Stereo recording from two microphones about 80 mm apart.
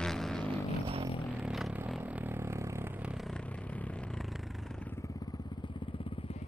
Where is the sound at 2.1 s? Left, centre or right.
Right.